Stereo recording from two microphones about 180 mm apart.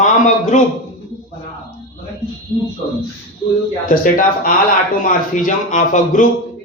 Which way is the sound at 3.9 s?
50° left (ahead or behind).